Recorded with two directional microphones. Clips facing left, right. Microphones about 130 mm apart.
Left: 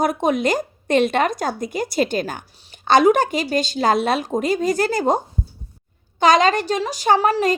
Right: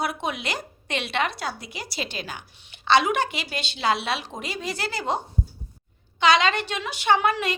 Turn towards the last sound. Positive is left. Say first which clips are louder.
# left 5 dB
turn(degrees=40)  # may be behind; listen again after turning